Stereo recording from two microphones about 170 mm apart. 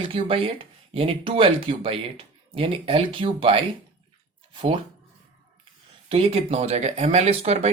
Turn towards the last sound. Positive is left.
turn(degrees=-40)  # may be behind; listen again after turning